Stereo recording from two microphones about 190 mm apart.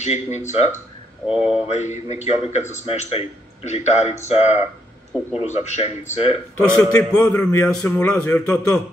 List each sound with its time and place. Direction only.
0.0 s a man's voice: 35° left (ahead or behind)
6.5 s a man's voice: 5° left (ahead or behind)
6.8 s a man's voice: 15° left (ahead or behind)
7.1 s a man's voice: 5° left (ahead or behind)